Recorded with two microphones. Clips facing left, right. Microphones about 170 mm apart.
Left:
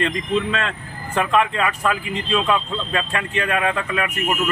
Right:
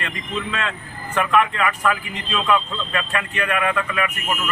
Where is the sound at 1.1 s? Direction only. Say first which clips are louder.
Even; 30° left (ahead or behind).